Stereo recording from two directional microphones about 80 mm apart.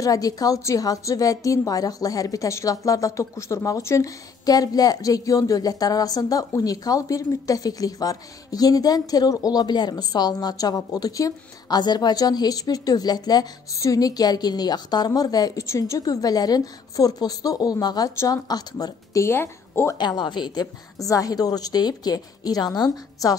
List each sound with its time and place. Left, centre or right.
0.0 s speech: left
4.5 s speech: left
11.8 s speech: left
19.2 s a woman's voice: left
20.0 s speech: left
21.0 s speech: left